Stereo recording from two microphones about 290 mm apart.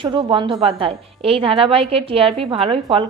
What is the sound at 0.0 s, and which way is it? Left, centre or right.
A woman's voice, centre.